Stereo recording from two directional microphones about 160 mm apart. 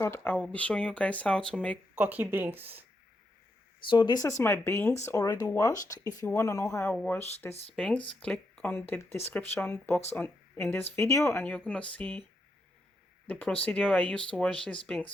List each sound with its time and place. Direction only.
0.0 s speech: 15° left (ahead or behind)
2.0 s speech: 10° right (ahead or behind)
3.8 s speech: 30° left (ahead or behind)
6.9 s speech: 10° left (ahead or behind)
13.2 s speech: 5° left (ahead or behind)